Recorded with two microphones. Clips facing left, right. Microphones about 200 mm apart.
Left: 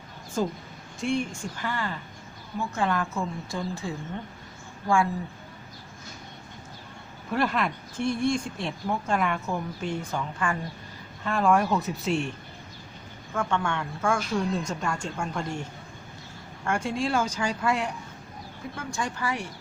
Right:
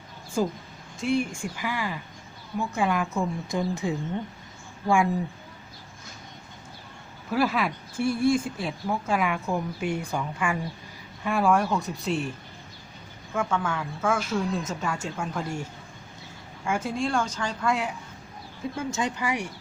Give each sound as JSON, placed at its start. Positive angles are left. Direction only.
{"t": 0.4, "sound": "speech", "side_deg": -5}
{"t": 7.3, "sound": "a woman's voice", "side_deg": -5}
{"t": 13.3, "sound": "a woman's voice", "side_deg": -5}
{"t": 16.6, "sound": "a woman's voice", "side_deg": -5}
{"t": 18.8, "sound": "speech", "side_deg": -20}